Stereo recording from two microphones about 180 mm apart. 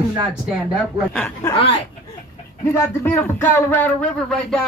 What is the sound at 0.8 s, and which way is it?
Speech, 10° left (ahead or behind).